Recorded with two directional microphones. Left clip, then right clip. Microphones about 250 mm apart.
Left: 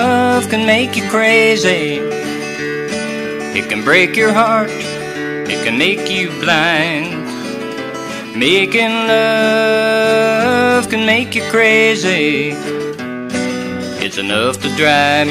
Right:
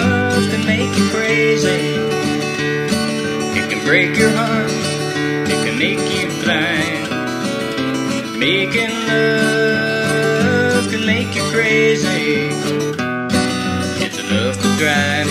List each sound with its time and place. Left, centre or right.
0.2 s music: left
3.9 s music: left
5.8 s music: left
8.4 s music: left
14.3 s music: left